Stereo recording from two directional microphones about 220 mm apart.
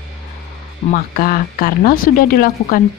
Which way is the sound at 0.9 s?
40° left (ahead or behind).